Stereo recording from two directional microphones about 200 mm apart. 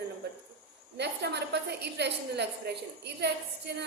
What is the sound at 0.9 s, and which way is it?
A woman's voice, 55° right (ahead or behind).